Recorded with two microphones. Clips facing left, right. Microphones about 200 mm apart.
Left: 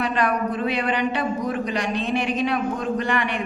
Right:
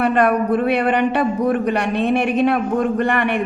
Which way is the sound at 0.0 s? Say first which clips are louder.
Right 6 dB; 60° right (ahead or behind).